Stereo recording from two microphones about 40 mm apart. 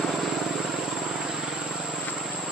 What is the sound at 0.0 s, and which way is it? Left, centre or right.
Vehicle, centre.